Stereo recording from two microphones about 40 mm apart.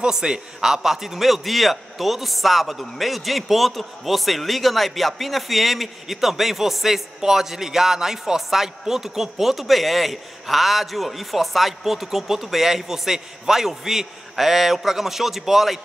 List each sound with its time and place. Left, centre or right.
0.0 s a man's voice: centre